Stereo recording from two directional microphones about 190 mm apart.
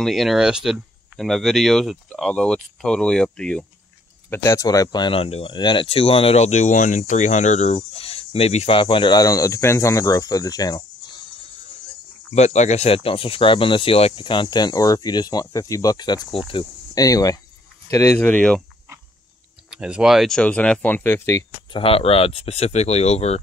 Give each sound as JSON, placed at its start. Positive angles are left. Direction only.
{"t": 0.0, "sound": "speech", "side_deg": 0}
{"t": 12.4, "sound": "speech", "side_deg": 35}
{"t": 19.7, "sound": "speech", "side_deg": -5}
{"t": 21.7, "sound": "speech", "side_deg": 30}